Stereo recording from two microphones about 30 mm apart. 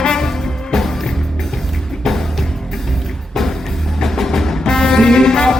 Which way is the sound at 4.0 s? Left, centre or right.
Centre.